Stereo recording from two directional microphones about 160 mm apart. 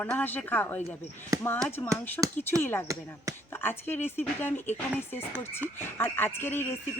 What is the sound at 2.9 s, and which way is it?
Speech, 20° right (ahead or behind).